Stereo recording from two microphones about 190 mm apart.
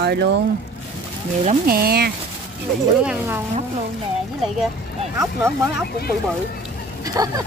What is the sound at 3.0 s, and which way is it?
Speech, 5° right (ahead or behind).